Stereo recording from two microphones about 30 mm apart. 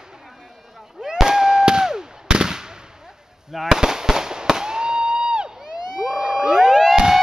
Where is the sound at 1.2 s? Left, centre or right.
Centre.